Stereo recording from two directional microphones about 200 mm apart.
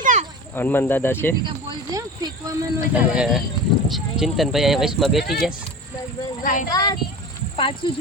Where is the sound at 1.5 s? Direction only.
20° right (ahead or behind).